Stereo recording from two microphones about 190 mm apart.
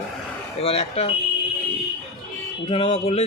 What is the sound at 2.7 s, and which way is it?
Speech, 30° left (ahead or behind).